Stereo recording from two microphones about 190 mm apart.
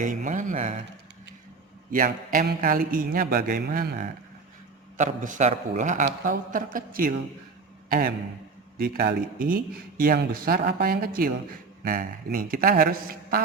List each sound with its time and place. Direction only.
0.0 s speech: 45° right (ahead or behind)
1.9 s a man's voice: 45° right (ahead or behind)